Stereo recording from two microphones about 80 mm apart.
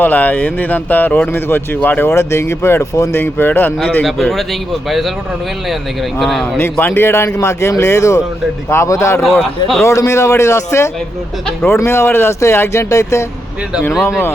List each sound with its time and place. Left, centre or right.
0.0 s speech: left
2.0 s speech: left
3.2 s speech: left
4.0 s speech: centre
6.1 s speech: centre
6.6 s speech: left